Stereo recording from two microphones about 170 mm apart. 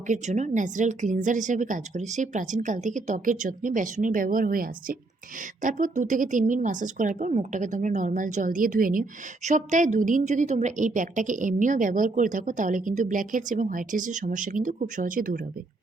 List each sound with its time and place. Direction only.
0.1 s speech: 45° right (ahead or behind)